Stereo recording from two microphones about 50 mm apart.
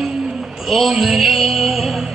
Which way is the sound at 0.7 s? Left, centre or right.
Centre.